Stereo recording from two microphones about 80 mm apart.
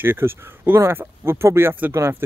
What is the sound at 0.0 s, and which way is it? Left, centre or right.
Speech, right.